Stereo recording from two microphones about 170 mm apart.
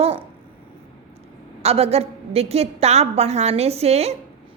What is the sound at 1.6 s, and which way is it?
A woman's voice, 35° right (ahead or behind).